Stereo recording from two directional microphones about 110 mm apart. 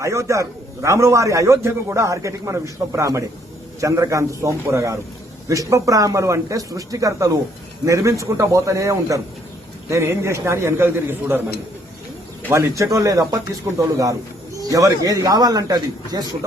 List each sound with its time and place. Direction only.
0.0 s a man's voice: 30° right (ahead or behind)
12.5 s speech: 25° right (ahead or behind)